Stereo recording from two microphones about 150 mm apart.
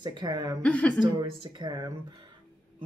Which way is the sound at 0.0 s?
25° right (ahead or behind).